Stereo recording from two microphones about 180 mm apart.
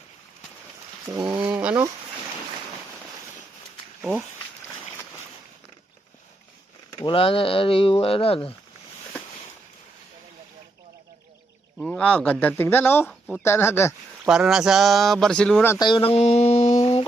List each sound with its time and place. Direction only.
1.0 s speech: 15° right (ahead or behind)
4.0 s speech: centre (ahead or behind)
7.0 s speech: 30° left (ahead or behind)
11.8 s speech: 5° left (ahead or behind)
14.3 s speech: 5° right (ahead or behind)
15.8 s a sound: 30° left (ahead or behind)